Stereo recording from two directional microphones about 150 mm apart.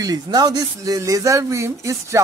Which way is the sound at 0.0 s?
25° right (ahead or behind).